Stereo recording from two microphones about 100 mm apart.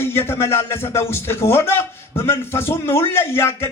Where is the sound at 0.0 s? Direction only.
25° left (ahead or behind).